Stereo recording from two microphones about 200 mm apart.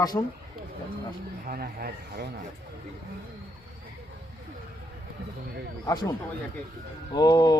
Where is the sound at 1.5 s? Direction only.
50° right (ahead or behind).